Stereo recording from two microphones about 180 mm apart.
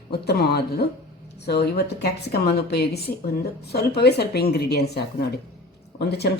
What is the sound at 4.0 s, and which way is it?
Speech, 65° left (ahead or behind).